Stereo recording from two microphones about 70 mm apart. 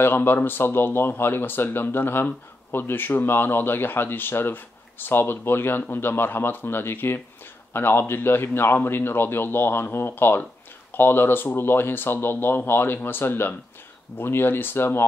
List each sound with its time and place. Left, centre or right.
0.0 s speech: left